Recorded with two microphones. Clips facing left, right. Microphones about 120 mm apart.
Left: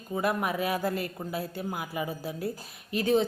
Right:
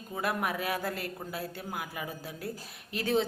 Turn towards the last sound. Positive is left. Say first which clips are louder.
# left 4 dB
turn(degrees=0)  # may be behind; listen again after turning